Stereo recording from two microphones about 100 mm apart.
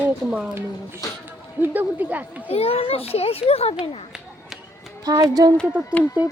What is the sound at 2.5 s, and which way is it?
A child's voice, 70° left (ahead or behind).